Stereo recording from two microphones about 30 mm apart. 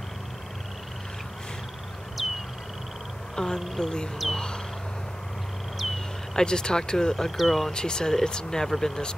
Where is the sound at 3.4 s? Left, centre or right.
Left.